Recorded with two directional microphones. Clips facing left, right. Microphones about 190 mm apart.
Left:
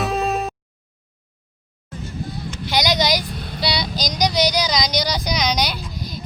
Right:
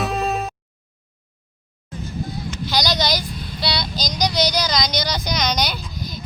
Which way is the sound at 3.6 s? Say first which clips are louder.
Left 2 dB; 15° left (ahead or behind).